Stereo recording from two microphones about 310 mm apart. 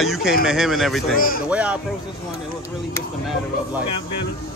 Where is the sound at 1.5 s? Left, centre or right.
Centre.